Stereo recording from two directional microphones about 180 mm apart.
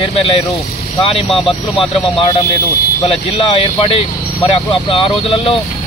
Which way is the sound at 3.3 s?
30° left (ahead or behind).